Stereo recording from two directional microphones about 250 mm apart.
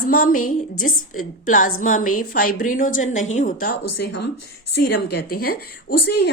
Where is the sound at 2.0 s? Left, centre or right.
Left.